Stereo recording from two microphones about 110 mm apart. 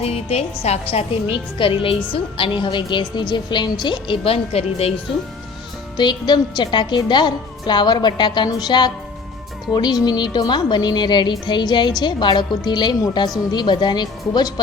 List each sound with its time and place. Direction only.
0.0 s a woman's voice: 65° left (ahead or behind)
1.5 s a woman's voice: 55° left (ahead or behind)
6.0 s a woman's voice: 40° left (ahead or behind)